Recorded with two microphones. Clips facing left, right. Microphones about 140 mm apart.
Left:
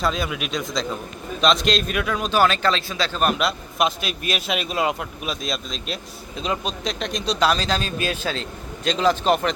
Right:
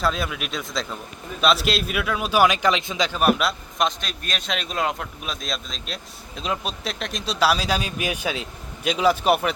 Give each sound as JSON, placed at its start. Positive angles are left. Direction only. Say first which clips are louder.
{"t": 0.0, "sound": "a man's voice", "louder": "left 1 dB", "side_deg": 0}